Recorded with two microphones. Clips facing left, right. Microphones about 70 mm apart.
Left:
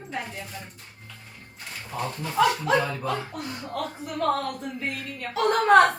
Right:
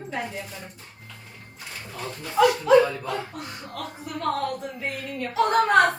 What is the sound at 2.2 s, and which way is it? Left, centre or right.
Speech, centre.